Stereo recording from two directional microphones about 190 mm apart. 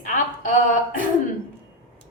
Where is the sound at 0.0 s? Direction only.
45° left (ahead or behind).